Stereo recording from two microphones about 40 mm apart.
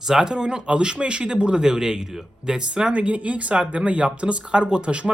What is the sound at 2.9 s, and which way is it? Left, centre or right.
Speech, right.